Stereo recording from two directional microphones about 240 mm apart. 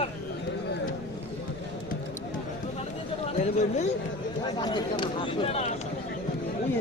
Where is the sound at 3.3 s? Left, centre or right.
Left.